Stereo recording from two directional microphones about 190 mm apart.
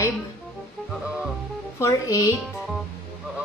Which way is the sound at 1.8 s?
15° left (ahead or behind).